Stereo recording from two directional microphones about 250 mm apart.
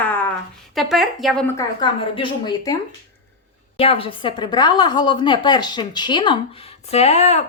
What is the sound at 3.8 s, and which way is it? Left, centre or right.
A woman's voice, left.